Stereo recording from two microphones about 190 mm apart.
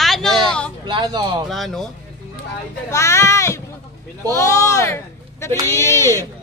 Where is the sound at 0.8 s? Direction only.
25° right (ahead or behind).